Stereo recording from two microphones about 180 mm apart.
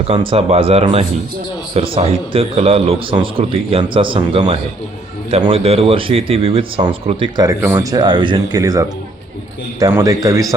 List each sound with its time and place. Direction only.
0.1 s a man's voice: 30° right (ahead or behind)